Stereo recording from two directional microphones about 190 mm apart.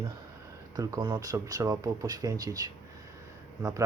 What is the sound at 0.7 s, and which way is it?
Speech, 20° right (ahead or behind).